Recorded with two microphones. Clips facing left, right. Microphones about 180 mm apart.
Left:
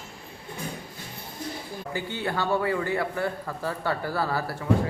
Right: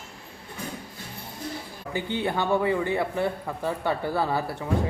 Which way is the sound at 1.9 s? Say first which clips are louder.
Right 3 dB; 20° right (ahead or behind).